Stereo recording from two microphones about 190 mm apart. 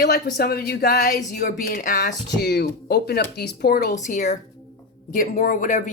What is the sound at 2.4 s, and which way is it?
Speech, 55° left (ahead or behind).